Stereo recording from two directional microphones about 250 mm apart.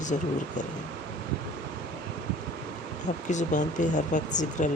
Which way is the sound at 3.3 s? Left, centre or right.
Left.